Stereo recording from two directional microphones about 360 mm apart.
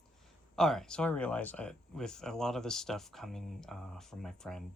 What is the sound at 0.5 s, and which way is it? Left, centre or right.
Speech, centre.